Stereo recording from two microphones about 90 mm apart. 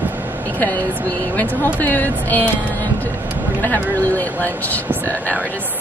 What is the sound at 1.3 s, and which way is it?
Speech, 20° left (ahead or behind).